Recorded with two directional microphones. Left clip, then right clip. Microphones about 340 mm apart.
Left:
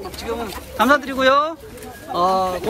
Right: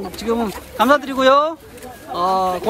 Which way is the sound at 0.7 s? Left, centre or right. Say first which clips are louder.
Right 1 dB; centre.